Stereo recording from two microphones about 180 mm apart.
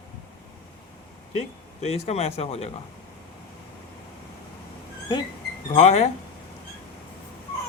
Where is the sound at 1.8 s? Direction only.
35° left (ahead or behind).